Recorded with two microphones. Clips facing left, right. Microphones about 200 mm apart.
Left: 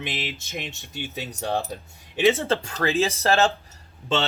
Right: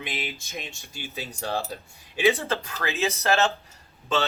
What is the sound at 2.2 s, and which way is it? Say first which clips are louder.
Speech: left 3 dB; 25° left (ahead or behind).